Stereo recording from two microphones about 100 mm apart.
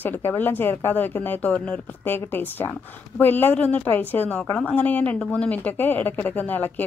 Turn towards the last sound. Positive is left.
turn(degrees=15)  # may be behind; listen again after turning